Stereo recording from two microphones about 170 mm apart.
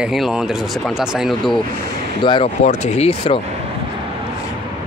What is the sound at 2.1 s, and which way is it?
Speech, 30° left (ahead or behind).